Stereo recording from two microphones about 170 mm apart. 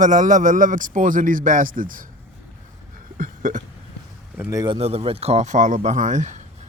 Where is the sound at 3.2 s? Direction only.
50° right (ahead or behind).